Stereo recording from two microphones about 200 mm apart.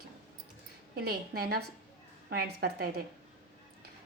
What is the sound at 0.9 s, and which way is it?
A woman's voice, 50° right (ahead or behind).